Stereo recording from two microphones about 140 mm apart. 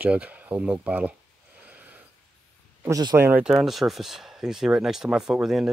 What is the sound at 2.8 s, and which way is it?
Speech, 25° right (ahead or behind).